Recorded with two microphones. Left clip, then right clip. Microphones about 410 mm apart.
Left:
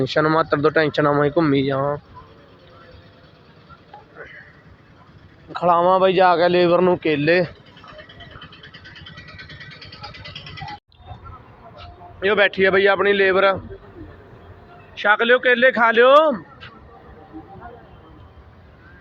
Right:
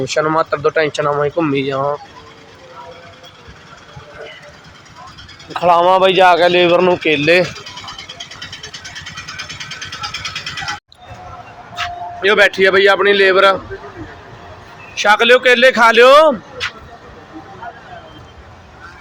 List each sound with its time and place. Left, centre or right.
0.0 s speech: left
5.5 s speech: left
8.8 s vehicle: centre
12.2 s speech: left
14.9 s a man's voice: left